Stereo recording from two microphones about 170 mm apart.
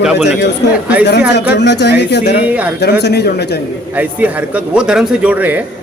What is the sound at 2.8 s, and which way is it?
Speech, 75° left (ahead or behind).